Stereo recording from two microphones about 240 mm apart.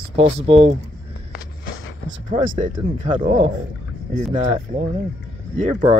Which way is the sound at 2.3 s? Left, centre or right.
Right.